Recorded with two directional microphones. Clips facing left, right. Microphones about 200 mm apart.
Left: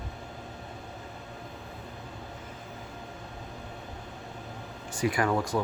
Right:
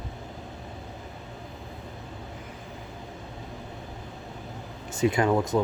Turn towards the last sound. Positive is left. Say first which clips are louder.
# right 4 dB
turn(degrees=-20)  # may be behind; listen again after turning